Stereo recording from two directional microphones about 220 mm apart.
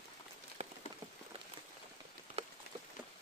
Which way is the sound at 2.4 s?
25° right (ahead or behind).